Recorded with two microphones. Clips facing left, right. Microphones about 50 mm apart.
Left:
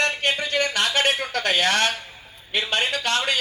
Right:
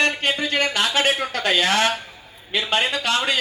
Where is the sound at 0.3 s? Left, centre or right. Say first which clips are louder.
Right 2 dB; right.